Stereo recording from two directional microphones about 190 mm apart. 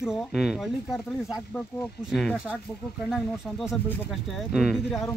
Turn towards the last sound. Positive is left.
turn(degrees=0)  # may be behind; listen again after turning